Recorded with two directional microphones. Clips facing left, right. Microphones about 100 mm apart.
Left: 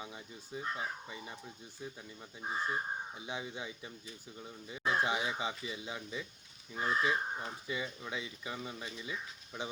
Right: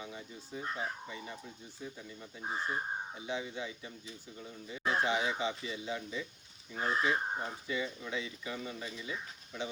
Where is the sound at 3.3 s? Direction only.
15° left (ahead or behind).